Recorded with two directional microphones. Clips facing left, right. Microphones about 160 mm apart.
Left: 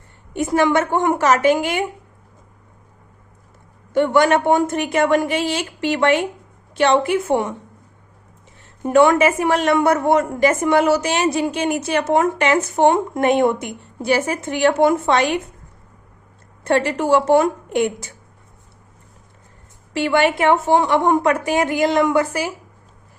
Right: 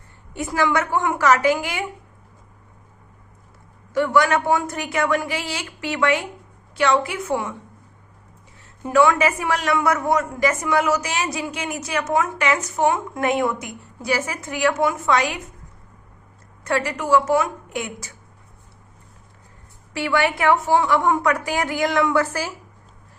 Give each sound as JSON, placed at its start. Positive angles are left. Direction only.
{"t": 0.3, "sound": "speech", "side_deg": 25}
{"t": 3.9, "sound": "speech", "side_deg": 25}
{"t": 8.8, "sound": "speech", "side_deg": 25}
{"t": 16.6, "sound": "speech", "side_deg": 30}
{"t": 20.0, "sound": "speech", "side_deg": 25}